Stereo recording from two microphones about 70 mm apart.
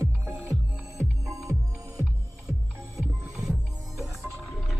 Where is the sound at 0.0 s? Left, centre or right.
Right.